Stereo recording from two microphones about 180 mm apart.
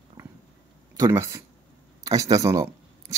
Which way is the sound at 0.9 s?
15° right (ahead or behind).